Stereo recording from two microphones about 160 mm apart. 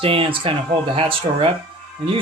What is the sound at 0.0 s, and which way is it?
Speech, 35° right (ahead or behind).